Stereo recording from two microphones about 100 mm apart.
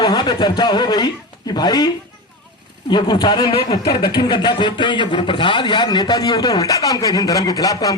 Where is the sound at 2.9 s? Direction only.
45° left (ahead or behind).